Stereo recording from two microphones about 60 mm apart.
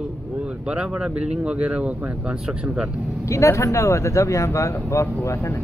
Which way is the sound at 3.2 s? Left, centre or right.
Left.